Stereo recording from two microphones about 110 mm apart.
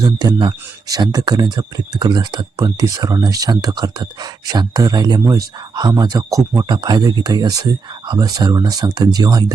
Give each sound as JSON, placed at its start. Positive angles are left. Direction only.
{"t": 0.0, "sound": "speech", "side_deg": -35}